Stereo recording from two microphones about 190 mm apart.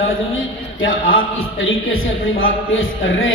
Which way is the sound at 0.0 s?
90° left.